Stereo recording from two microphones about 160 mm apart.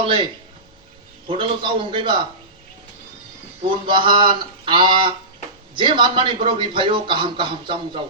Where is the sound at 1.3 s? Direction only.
30° right (ahead or behind).